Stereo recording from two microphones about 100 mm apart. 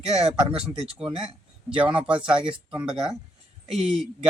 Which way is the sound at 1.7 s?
10° right (ahead or behind).